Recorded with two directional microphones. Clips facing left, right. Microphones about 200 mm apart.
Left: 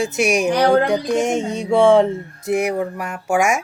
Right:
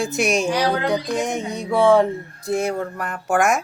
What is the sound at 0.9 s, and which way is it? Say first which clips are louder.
Speech: left 4 dB; 25° left (ahead or behind).